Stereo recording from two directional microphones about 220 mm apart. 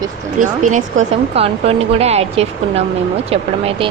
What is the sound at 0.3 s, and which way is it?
Speech, 35° right (ahead or behind).